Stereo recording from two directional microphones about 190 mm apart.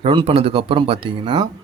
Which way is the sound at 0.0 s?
30° right (ahead or behind).